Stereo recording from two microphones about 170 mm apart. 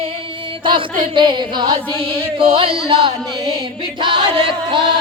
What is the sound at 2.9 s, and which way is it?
Speech, 25° right (ahead or behind).